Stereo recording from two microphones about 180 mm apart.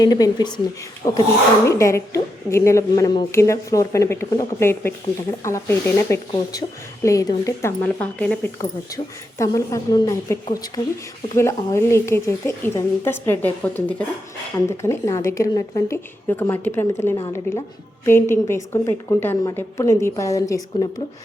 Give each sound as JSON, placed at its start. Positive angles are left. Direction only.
{"t": 0.0, "sound": "a woman's voice", "side_deg": 20}
{"t": 9.4, "sound": "a woman's voice", "side_deg": 15}